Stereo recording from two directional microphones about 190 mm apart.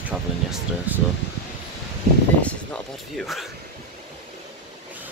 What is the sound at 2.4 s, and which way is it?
Speech, 5° left (ahead or behind).